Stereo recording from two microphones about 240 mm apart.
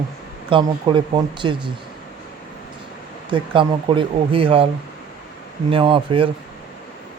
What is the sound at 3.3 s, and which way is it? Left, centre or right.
Speech, right.